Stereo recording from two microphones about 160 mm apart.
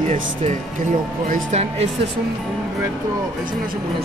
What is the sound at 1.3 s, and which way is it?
Speech, 45° right (ahead or behind).